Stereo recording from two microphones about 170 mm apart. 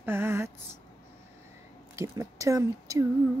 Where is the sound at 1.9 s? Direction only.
20° right (ahead or behind).